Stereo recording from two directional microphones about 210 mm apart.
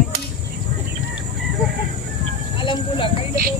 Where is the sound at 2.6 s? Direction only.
25° left (ahead or behind).